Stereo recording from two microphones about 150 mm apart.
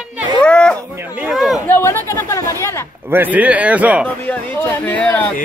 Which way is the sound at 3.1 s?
10° right (ahead or behind).